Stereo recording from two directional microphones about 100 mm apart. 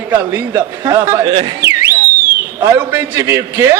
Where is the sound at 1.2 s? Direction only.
60° right (ahead or behind).